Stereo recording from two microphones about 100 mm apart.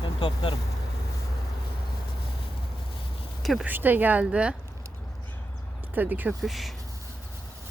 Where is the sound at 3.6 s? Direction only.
20° right (ahead or behind).